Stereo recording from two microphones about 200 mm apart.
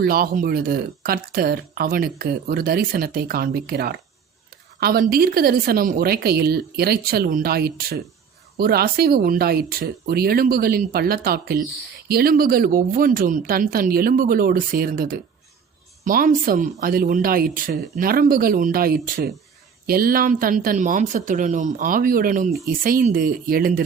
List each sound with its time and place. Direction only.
0.0 s a woman's voice: 50° right (ahead or behind)